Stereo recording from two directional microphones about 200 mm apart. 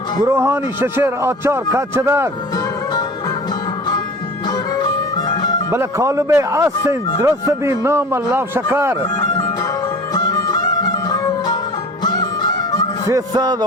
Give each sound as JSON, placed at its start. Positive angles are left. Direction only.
{"t": 0.3, "sound": "a man's voice", "side_deg": -10}
{"t": 4.4, "sound": "music", "side_deg": 20}
{"t": 5.7, "sound": "a man's voice", "side_deg": -15}
{"t": 10.2, "sound": "music", "side_deg": 20}
{"t": 13.1, "sound": "music", "side_deg": -20}